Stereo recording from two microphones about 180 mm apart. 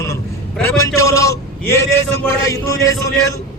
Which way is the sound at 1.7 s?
15° left (ahead or behind).